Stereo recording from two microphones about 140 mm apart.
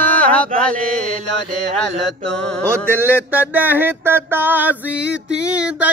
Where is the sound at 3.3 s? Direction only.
15° right (ahead or behind).